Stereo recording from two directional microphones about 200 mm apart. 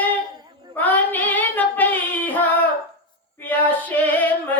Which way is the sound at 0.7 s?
10° left (ahead or behind).